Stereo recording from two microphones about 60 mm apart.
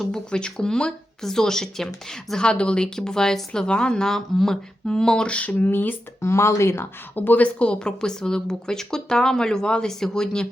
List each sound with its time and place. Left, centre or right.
0.0 s a woman's voice: centre; by 6.0 s left
6.2 s speech: left
7.2 s a woman's voice: left; by 10.4 s centre